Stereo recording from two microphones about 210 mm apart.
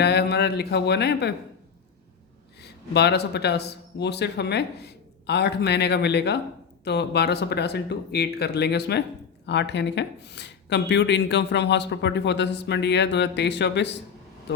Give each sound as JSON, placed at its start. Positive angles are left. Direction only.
{"t": 0.0, "sound": "speech", "side_deg": 50}
{"t": 2.6, "sound": "speech", "side_deg": 50}